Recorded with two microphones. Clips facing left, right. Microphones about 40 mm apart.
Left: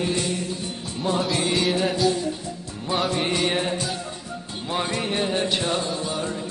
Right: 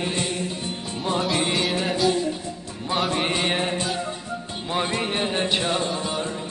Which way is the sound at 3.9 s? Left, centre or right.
Right.